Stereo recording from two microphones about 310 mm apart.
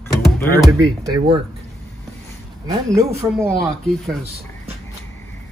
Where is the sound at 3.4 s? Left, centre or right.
Centre.